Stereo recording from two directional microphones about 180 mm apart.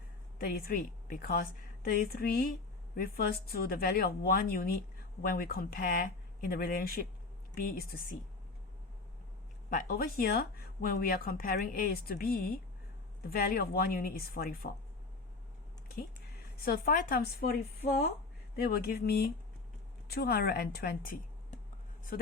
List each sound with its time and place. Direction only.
0.3 s speech: 55° left (ahead or behind)
9.6 s speech: 50° left (ahead or behind)
16.6 s speech: 55° left (ahead or behind)
18.5 s speech: 55° left (ahead or behind)